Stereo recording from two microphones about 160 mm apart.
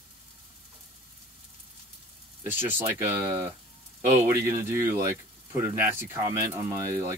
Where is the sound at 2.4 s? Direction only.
15° right (ahead or behind).